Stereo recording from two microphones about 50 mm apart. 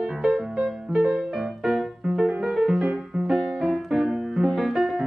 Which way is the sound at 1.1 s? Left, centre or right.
Centre.